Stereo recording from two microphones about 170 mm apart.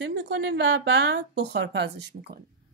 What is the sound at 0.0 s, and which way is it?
A woman's voice, 80° right.